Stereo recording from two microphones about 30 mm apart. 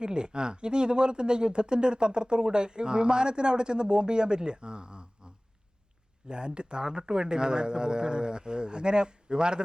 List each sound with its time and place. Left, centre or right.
0.0 s speech: right